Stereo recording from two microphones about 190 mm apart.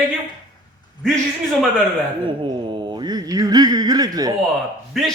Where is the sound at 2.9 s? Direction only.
20° right (ahead or behind).